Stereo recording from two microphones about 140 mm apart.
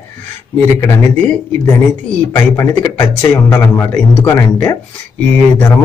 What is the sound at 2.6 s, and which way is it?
A man's voice, 20° left (ahead or behind).